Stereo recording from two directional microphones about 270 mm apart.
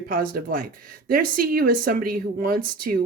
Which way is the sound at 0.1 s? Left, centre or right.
Right.